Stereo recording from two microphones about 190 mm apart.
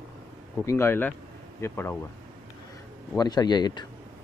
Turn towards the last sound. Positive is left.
turn(degrees=20)  # may be behind; listen again after turning